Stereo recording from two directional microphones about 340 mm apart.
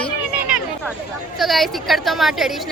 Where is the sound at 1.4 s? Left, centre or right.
Centre.